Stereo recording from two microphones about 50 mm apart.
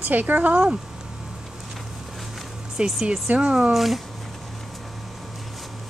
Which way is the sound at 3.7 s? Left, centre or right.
Centre.